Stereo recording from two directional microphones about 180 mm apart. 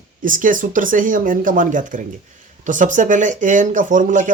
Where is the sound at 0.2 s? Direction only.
50° right (ahead or behind).